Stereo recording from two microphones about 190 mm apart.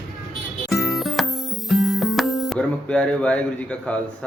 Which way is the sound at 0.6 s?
Centre (ahead or behind).